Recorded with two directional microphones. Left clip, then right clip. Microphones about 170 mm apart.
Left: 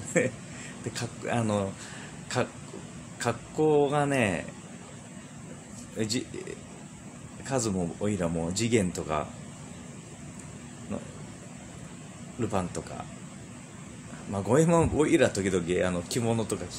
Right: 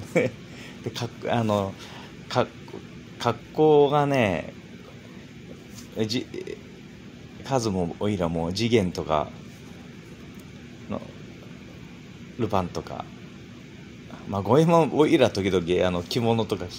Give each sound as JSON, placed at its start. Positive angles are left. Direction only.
{"t": 0.9, "sound": "speech", "side_deg": 0}
{"t": 5.9, "sound": "speech", "side_deg": 0}
{"t": 7.4, "sound": "speech", "side_deg": 0}
{"t": 10.9, "sound": "speech", "side_deg": -5}
{"t": 12.4, "sound": "speech", "side_deg": -5}
{"t": 14.3, "sound": "speech", "side_deg": 0}